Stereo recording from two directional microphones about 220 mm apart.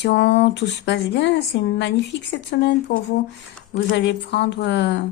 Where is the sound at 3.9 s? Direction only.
50° left (ahead or behind).